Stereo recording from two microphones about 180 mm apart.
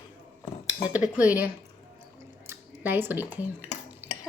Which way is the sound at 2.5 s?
10° right (ahead or behind).